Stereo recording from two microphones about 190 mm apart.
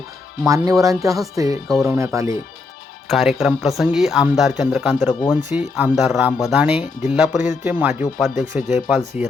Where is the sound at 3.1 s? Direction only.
Centre (ahead or behind).